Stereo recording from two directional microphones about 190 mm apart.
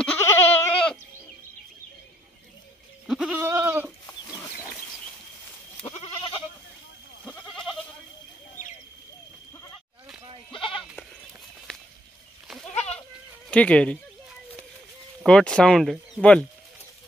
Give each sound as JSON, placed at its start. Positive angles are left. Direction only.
{"t": 0.0, "sound": "goat", "side_deg": 10}
{"t": 3.1, "sound": "goat", "side_deg": -5}
{"t": 3.3, "sound": "goat", "side_deg": -15}
{"t": 4.0, "sound": "chicken", "side_deg": 15}
{"t": 5.8, "sound": "goat", "side_deg": 35}
{"t": 7.2, "sound": "goat", "side_deg": 5}
{"t": 13.5, "sound": "speech", "side_deg": 5}
{"t": 15.2, "sound": "speech", "side_deg": 5}